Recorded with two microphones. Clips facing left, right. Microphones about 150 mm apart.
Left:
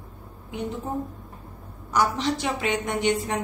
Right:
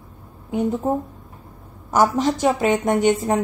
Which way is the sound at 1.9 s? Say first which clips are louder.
Right 6 dB; 45° right (ahead or behind).